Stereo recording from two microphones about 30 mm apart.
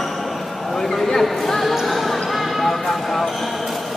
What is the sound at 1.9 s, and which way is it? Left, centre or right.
Basketball bounce, centre.